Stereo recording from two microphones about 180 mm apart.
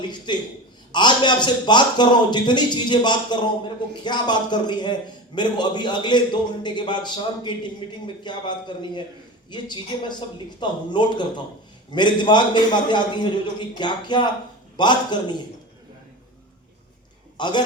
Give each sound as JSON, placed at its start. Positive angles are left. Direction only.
{"t": 0.0, "sound": "a man's voice", "side_deg": 25}
{"t": 17.3, "sound": "a man's voice", "side_deg": 25}